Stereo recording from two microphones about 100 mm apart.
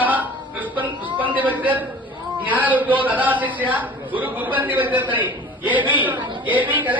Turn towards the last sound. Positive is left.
turn(degrees=-15)  # may be behind; listen again after turning